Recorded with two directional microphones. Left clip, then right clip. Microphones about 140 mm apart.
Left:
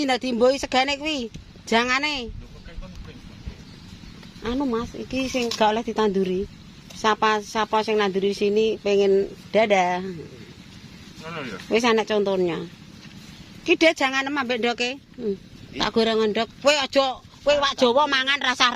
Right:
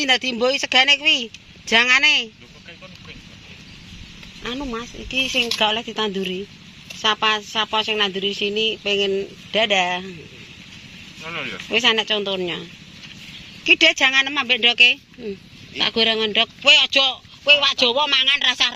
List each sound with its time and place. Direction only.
0.0 s speech: 20° left (ahead or behind)
4.4 s a man's voice: 30° left (ahead or behind)
11.2 s a man's voice: 55° left (ahead or behind)
11.7 s speech: 40° left (ahead or behind)
13.7 s speech: 30° left (ahead or behind)
14.8 s speech: 40° left (ahead or behind)
16.6 s a man's voice: 45° left (ahead or behind); by 18.7 s 65° left (ahead or behind)